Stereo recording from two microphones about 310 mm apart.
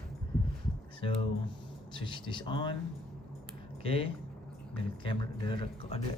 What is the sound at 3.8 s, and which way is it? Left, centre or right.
Speech, centre.